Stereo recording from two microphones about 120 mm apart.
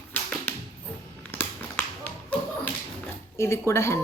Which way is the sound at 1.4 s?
15° left (ahead or behind).